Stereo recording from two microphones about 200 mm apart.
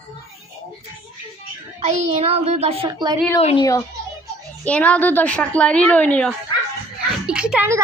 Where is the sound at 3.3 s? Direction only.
25° left (ahead or behind).